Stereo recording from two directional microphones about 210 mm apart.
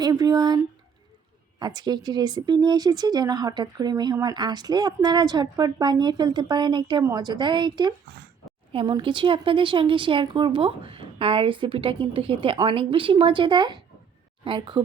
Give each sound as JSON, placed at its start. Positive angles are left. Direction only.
{"t": 0.0, "sound": "speech", "side_deg": -15}